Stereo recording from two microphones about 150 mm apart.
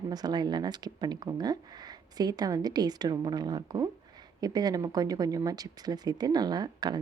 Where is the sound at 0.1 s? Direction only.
25° right (ahead or behind).